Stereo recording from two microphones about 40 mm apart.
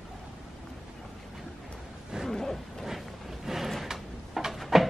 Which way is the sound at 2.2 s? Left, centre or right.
Centre.